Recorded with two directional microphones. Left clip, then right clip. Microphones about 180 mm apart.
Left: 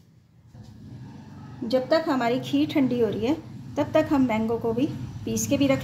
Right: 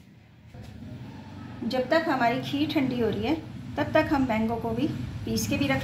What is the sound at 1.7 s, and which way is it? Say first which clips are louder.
A woman's voice: left 2 dB; 65° left (ahead or behind).